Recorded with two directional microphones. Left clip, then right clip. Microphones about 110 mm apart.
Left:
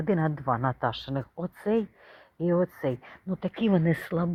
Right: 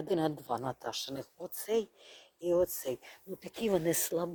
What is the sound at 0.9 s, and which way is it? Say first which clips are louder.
Speech: left 5 dB; 30° right (ahead or behind).